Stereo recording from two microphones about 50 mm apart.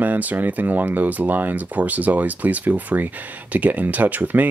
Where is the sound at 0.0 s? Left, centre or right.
Right.